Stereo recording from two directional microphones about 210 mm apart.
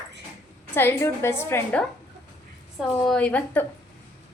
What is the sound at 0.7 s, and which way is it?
Speech, 10° left (ahead or behind).